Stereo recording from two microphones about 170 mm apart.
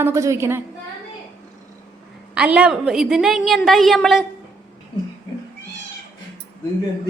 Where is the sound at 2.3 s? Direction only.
5° right (ahead or behind).